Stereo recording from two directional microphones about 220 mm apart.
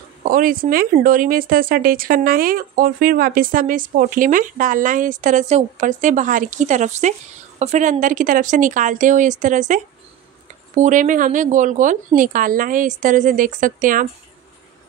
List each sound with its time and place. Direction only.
0.2 s speech: 40° right (ahead or behind)